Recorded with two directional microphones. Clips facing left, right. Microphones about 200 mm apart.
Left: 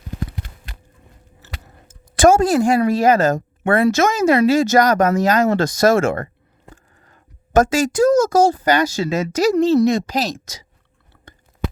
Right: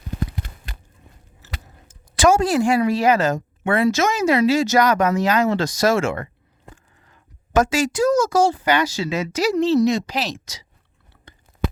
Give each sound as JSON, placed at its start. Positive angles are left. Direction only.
{"t": 1.9, "sound": "a woman's voice", "side_deg": 50}